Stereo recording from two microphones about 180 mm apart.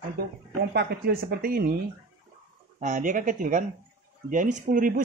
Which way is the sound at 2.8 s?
45° right (ahead or behind).